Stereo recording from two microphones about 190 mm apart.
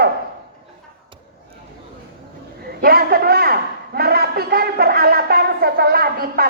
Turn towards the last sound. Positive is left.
turn(degrees=-55)  # may be behind; listen again after turning